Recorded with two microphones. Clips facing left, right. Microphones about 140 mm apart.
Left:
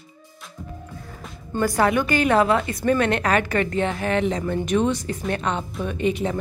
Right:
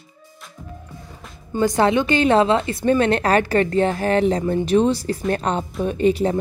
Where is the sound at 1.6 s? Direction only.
20° right (ahead or behind).